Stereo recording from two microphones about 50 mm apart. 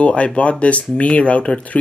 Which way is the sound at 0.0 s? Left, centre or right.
Left.